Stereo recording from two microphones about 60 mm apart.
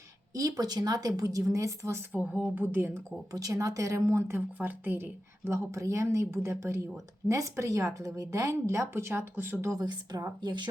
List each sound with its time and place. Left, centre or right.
0.3 s speech: right
2.1 s speech: right
2.7 s speech: right
3.3 s speech: right
4.4 s speech: right
7.3 s speech: right
9.7 s speech: right